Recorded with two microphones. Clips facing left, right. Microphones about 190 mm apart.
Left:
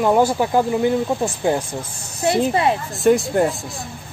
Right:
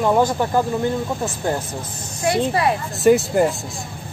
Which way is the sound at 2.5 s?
25° left (ahead or behind).